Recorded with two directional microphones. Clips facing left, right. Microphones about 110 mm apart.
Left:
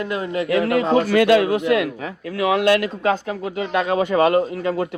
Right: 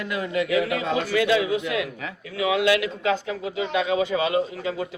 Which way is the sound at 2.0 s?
35° left (ahead or behind).